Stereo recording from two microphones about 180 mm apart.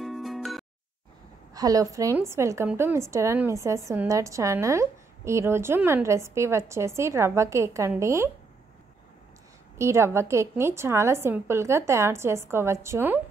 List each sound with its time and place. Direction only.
0.0 s music: centre (ahead or behind)
1.5 s a woman's voice: 20° right (ahead or behind)
9.8 s a woman's voice: 15° right (ahead or behind)